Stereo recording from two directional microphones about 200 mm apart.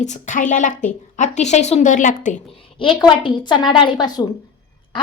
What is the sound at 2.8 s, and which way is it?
A child's voice, 25° left (ahead or behind).